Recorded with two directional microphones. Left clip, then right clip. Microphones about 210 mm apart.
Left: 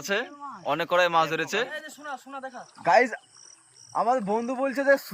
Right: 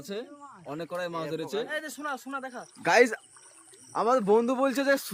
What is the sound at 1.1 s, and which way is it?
Speech, 30° left (ahead or behind).